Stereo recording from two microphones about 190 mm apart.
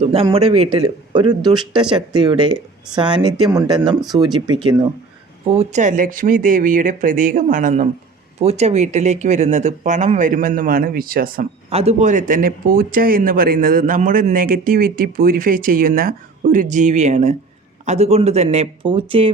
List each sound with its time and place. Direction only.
0.0 s speech: 30° right (ahead or behind)
5.5 s speech: 35° right (ahead or behind)
11.7 s speech: 35° right (ahead or behind)